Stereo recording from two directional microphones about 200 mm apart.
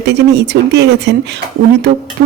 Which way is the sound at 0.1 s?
60° right (ahead or behind).